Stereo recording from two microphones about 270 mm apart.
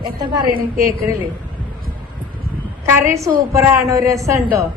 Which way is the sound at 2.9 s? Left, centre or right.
Centre.